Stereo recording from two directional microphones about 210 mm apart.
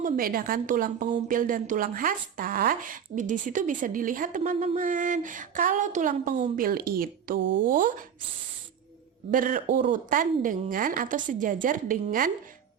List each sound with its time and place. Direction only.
0.0 s a woman's voice: 45° right (ahead or behind)
7.3 s speech: 60° right (ahead or behind)
7.6 s a woman's voice: 40° right (ahead or behind)
9.3 s a woman's voice: 40° right (ahead or behind)